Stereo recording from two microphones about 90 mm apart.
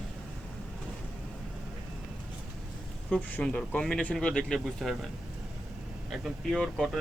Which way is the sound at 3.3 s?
15° left (ahead or behind).